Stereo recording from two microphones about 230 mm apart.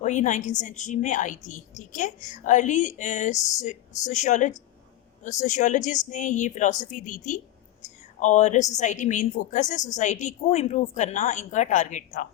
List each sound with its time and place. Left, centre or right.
0.0 s a woman's voice: left